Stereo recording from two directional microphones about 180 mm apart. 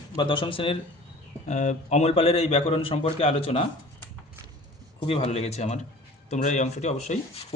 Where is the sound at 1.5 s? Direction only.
40° left (ahead or behind).